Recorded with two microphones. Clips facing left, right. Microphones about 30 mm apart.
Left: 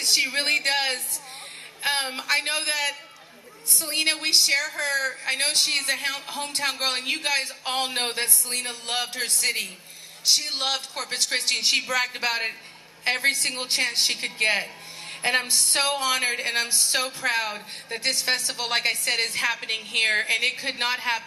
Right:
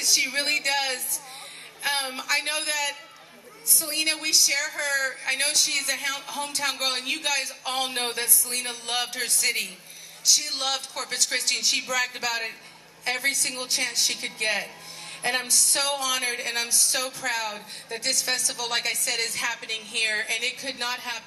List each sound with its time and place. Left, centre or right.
0.0 s a woman's voice: left
8.1 s a man's voice: left
11.6 s a woman's voice: left